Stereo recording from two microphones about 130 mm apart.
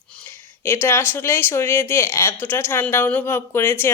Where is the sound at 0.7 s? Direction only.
20° left (ahead or behind).